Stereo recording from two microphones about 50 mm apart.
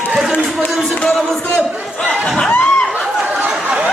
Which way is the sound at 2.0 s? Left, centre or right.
Left.